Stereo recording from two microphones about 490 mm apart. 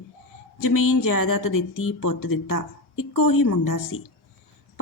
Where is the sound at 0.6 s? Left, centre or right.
Left.